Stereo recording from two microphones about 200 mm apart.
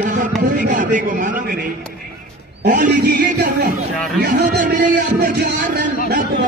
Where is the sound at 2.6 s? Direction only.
45° right (ahead or behind).